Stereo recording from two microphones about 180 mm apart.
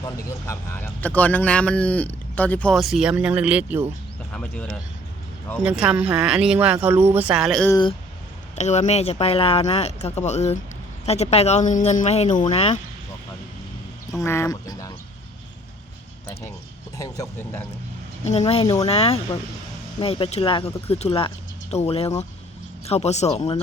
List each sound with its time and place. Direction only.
0.0 s speech: 15° left (ahead or behind); by 3.8 s 10° right (ahead or behind)
4.3 s speech: 5° left (ahead or behind)
7.7 s speech: 25° left (ahead or behind)
8.5 s speech: 40° left (ahead or behind)
14.2 s speech: 15° left (ahead or behind)
17.0 s speech: 15° left (ahead or behind)
18.3 s speech: 35° left (ahead or behind)